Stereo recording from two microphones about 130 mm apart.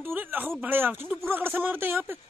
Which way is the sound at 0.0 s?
15° right (ahead or behind).